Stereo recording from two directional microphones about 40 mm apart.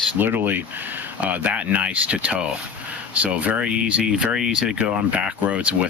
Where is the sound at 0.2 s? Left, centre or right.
Right.